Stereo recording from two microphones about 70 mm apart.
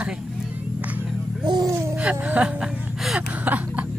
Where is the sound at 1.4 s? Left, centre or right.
Right.